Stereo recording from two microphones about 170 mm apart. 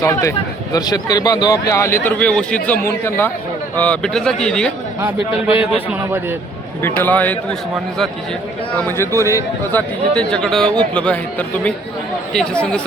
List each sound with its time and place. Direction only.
0.0 s a man's voice: 15° left (ahead or behind)
5.5 s a man's voice: 35° left (ahead or behind)
6.8 s a man's voice: 10° left (ahead or behind)
8.7 s a man's voice: 15° left (ahead or behind)
10.2 s a man's voice: 5° left (ahead or behind)